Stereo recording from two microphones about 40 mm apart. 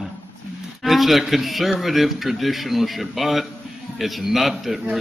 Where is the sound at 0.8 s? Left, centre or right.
Centre.